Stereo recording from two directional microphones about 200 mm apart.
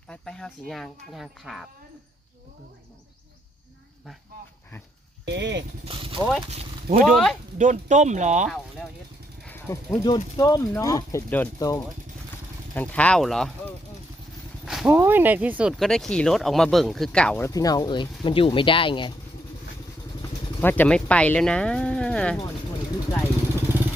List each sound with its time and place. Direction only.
0.1 s speech: 5° left (ahead or behind)
5.2 s speech: 60° right (ahead or behind)
5.8 s speech: 25° right (ahead or behind)
6.1 s speech: centre (ahead or behind)
6.5 s speech: 30° right (ahead or behind)
7.0 s speech: centre (ahead or behind)
7.6 s speech: 40° right (ahead or behind)
9.6 s speech: 15° left (ahead or behind)
14.6 s a sound: centre (ahead or behind)
14.9 s speech: 10° right (ahead or behind); by 19.1 s 25° left (ahead or behind)
20.6 s speech: 10° left (ahead or behind)
23.7 s vehicle: 10° right (ahead or behind)